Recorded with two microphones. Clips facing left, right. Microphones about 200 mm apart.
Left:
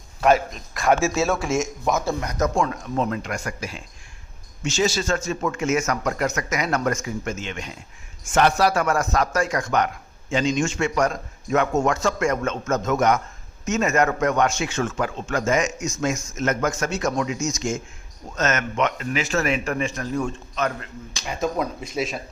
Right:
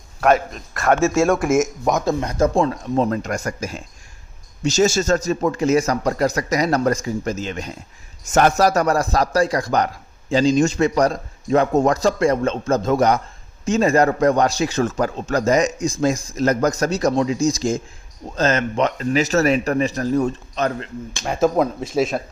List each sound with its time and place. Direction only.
0.3 s a man's voice: centre (ahead or behind)
2.2 s a man's voice: 30° right (ahead or behind)
21.9 s speech: 45° right (ahead or behind)